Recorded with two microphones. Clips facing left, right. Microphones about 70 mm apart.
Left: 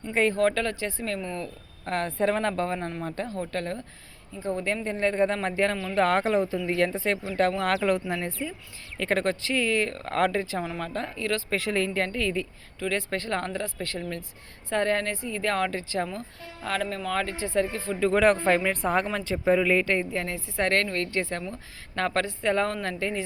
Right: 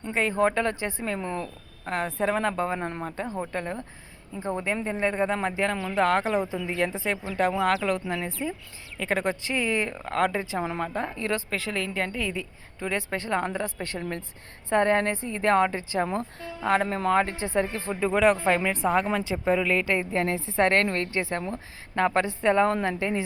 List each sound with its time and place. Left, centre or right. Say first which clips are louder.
0.1 s speech: left 3 dB; centre
0.3 s speech: right 1 dB; right
1.8 s speech: left 1 dB; centre; by 4.6 s right
4.6 s speech: even; centre
10.1 s speech: even; centre
10.3 s speech: right 1 dB; centre
11.5 s speech: left 3 dB; centre
12.8 s speech: left 1 dB; centre
16.0 s speech: right 6 dB; right
16.6 s speech: right 6 dB; right
18.1 s speech: even; centre
19.5 s speech: left 3 dB; centre
19.8 s speech: even; centre
20.1 s speech: right 5 dB; right